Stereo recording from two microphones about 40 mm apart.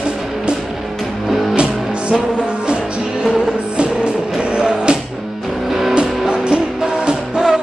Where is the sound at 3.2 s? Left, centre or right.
Centre.